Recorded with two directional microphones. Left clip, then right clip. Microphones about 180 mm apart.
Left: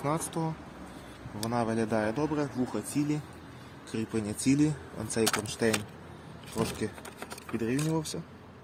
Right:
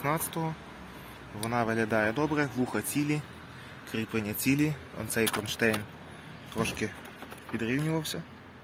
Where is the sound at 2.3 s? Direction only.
10° right (ahead or behind).